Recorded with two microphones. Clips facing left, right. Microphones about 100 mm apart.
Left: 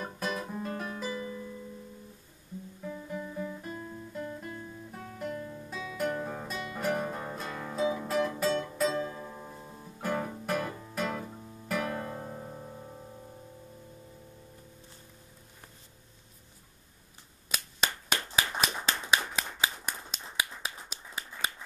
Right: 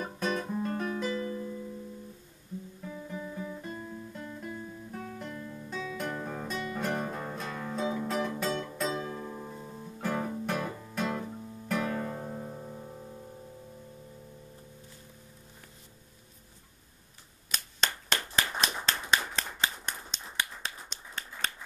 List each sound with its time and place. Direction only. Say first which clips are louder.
0.0 s guitar: right 3 dB; centre (ahead or behind)
2.9 s guitar: left 1 dB; centre (ahead or behind)
5.4 s music: left 1 dB; 20° left (ahead or behind)
5.7 s music: left 2 dB; 5° left (ahead or behind)
17.5 s clapping: even; 10° left (ahead or behind)
18.6 s clapping: even; 5° right (ahead or behind)
18.9 s finger snapping: left 1 dB; 5° left (ahead or behind)